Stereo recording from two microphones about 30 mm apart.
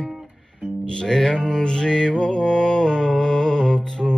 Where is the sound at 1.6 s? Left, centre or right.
Left.